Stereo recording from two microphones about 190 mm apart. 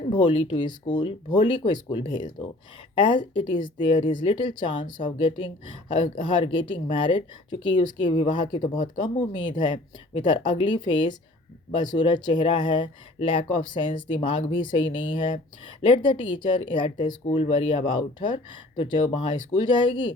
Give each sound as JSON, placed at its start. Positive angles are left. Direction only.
{"t": 0.1, "sound": "speech", "side_deg": 25}